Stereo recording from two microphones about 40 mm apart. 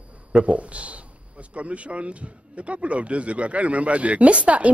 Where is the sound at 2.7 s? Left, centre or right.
Right.